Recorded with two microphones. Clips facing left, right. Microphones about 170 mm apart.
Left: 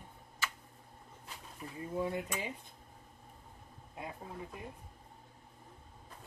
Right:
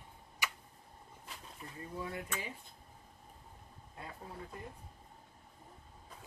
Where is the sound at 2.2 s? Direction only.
15° left (ahead or behind).